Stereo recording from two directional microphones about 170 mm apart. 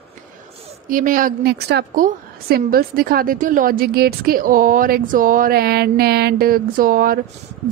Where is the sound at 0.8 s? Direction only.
55° right (ahead or behind); by 1.9 s 75° right (ahead or behind).